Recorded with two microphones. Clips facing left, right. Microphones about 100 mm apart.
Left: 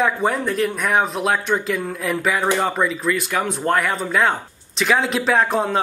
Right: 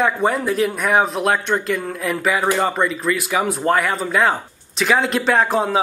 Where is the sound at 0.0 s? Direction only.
Centre (ahead or behind).